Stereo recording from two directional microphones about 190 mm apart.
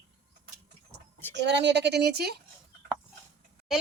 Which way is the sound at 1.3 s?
65° right (ahead or behind).